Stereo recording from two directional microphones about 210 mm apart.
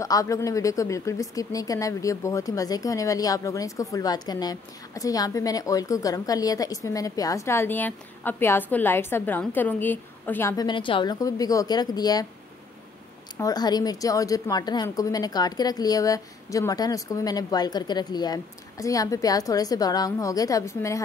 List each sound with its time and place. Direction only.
0.0 s speech: 15° left (ahead or behind)
13.4 s speech: 20° left (ahead or behind)